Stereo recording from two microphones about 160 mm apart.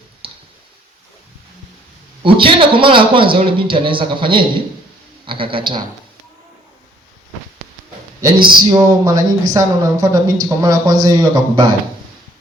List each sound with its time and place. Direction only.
0.2 s clicking: 35° right (ahead or behind)
2.2 s a man's voice: 30° right (ahead or behind)
8.2 s a man's voice: 30° right (ahead or behind)